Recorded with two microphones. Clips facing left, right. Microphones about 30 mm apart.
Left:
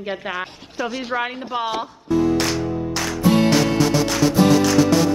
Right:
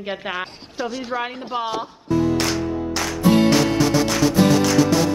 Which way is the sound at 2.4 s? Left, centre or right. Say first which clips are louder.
Even; centre.